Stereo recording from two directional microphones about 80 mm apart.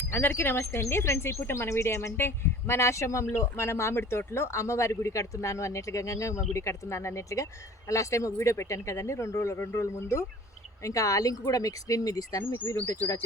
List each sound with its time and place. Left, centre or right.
0.1 s speech: left